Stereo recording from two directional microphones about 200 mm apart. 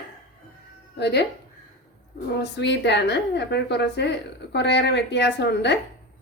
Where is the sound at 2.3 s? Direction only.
60° left (ahead or behind).